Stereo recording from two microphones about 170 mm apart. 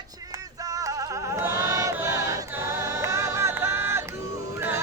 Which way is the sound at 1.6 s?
15° right (ahead or behind).